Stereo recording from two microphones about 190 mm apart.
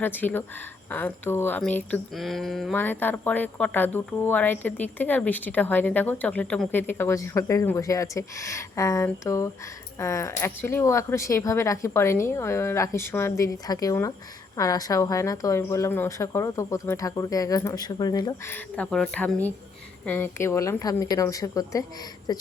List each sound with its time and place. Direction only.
0.0 s speech: 10° left (ahead or behind)